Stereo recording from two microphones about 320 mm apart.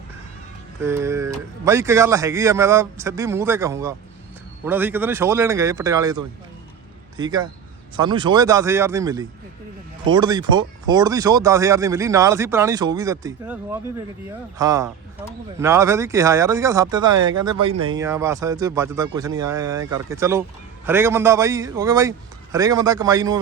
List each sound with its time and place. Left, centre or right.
0.8 s speech: centre